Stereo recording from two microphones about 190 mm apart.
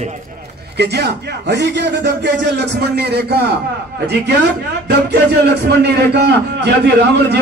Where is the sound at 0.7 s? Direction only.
60° right (ahead or behind).